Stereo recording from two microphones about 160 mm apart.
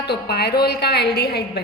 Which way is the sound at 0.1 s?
90° left.